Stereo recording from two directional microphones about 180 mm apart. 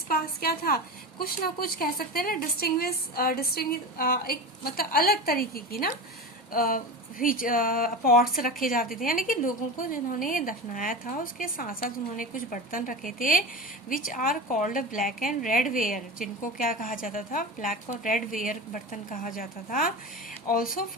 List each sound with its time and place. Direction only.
0.1 s a woman's voice: 55° left (ahead or behind)